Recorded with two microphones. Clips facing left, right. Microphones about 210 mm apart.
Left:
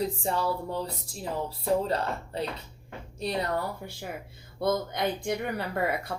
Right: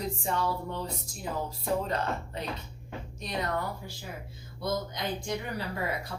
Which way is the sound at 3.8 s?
60° left (ahead or behind).